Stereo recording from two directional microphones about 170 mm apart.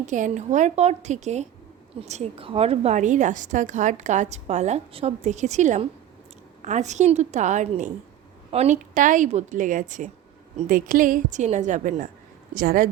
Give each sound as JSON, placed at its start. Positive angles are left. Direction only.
{"t": 0.0, "sound": "a woman's voice", "side_deg": -45}